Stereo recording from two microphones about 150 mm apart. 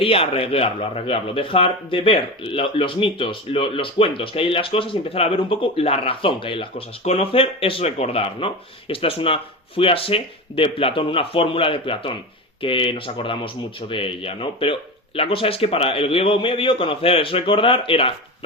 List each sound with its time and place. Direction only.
0.0 s speech: 40° left (ahead or behind)